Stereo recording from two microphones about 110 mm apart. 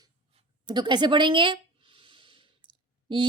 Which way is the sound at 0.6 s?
40° right (ahead or behind).